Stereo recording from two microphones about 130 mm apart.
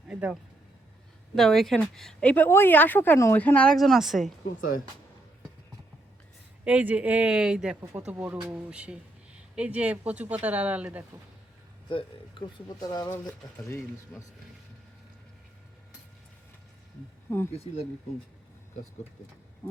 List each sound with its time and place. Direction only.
0.1 s a sound: 10° right (ahead or behind)
1.4 s a woman's voice: centre (ahead or behind)
6.7 s speech: 10° right (ahead or behind)
8.4 s speech: 25° right (ahead or behind)
8.7 s speech: 10° right (ahead or behind)
12.6 s speech: 30° left (ahead or behind)
13.7 s a woman's voice: 20° left (ahead or behind)
17.2 s speech: 20° left (ahead or behind)
17.5 s speech: 50° left (ahead or behind)